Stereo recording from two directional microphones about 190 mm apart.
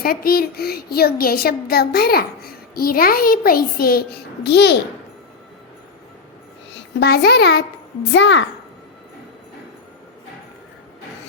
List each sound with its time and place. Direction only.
0.0 s a woman's voice: 50° left (ahead or behind)
6.7 s a child's voice: 55° left (ahead or behind)
8.1 s a child's voice: 70° left (ahead or behind)